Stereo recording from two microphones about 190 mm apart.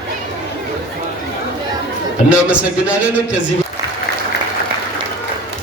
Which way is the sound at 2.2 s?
5° right (ahead or behind).